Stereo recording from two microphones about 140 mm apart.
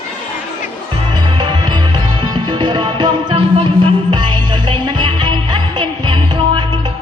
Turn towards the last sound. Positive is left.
turn(degrees=-35)  # may be behind; listen again after turning